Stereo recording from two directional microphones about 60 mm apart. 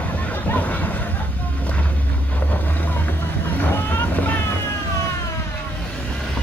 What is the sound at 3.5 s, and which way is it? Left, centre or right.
Boat, left.